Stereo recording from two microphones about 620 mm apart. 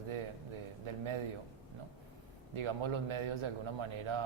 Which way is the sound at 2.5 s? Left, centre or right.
Right.